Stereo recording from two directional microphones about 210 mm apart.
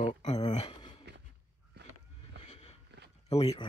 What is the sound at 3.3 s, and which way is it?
Speech, 30° left (ahead or behind).